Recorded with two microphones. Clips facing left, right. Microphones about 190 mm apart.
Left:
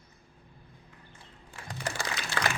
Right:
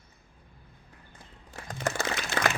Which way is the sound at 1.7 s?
45° right (ahead or behind).